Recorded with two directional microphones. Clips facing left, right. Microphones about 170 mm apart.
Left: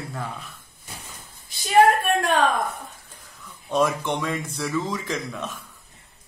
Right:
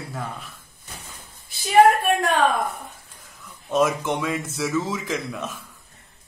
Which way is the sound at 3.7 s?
Centre (ahead or behind).